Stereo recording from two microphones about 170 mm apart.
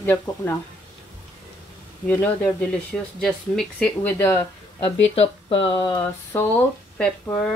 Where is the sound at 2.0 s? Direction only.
5° left (ahead or behind).